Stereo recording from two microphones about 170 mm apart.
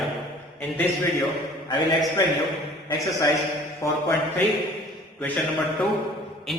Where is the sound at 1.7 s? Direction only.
20° left (ahead or behind).